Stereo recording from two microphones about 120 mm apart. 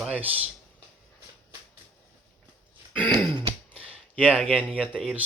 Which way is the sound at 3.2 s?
40° right (ahead or behind).